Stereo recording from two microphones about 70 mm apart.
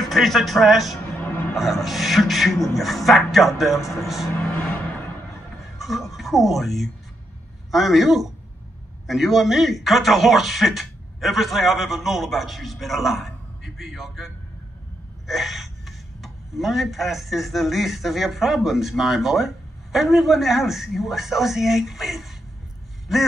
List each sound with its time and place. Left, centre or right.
0.0 s speech: centre
1.2 s a sound: left
1.5 s speech: centre
5.8 s speech: centre